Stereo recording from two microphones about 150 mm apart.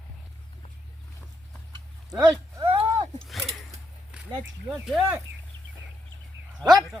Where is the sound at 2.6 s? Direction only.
40° right (ahead or behind).